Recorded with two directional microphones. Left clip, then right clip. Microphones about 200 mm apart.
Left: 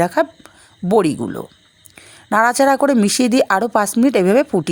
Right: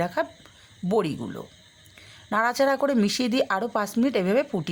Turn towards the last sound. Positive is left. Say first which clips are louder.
# left 10 dB
turn(degrees=35)  # may be behind; listen again after turning